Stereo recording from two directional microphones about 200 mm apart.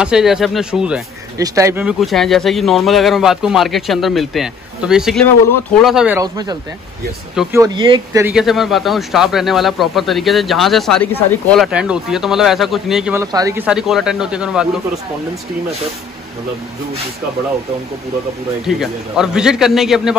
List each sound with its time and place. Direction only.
0.0 s speech: 5° right (ahead or behind)
1.4 s speech: 15° right (ahead or behind)
6.1 s speech: 20° right (ahead or behind)
7.5 s speech: 20° right (ahead or behind)
8.2 s speech: 5° right (ahead or behind)
13.2 s speech: 15° right (ahead or behind)
13.7 s speech: 5° right (ahead or behind)
18.7 s speech: centre (ahead or behind)